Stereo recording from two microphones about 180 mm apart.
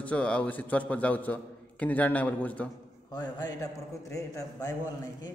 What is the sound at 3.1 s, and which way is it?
A man's voice, 20° left (ahead or behind).